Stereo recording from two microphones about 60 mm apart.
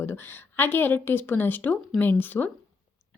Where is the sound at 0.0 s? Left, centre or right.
Left.